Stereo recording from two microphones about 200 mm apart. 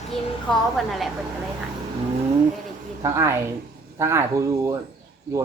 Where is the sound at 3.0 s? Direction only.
15° right (ahead or behind).